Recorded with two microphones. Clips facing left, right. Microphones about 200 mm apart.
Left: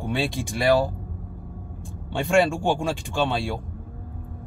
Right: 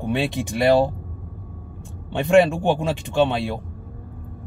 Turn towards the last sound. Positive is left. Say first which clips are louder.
# right 5 dB
turn(degrees=-20)  # may be behind; listen again after turning